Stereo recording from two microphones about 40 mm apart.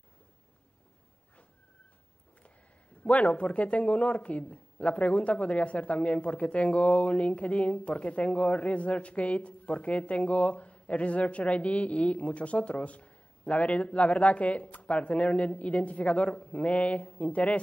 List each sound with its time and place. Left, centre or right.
3.0 s a man's voice: left